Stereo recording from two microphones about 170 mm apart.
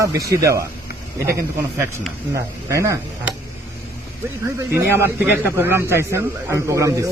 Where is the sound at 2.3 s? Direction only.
15° right (ahead or behind).